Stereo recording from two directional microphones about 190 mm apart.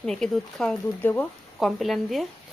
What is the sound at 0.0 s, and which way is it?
Speech, centre (ahead or behind).